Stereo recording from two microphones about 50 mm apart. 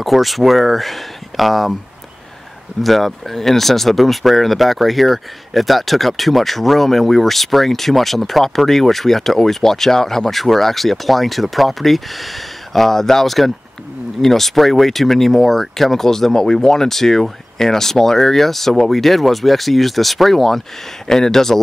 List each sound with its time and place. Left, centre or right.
0.0 s speech: centre
2.8 s speech: centre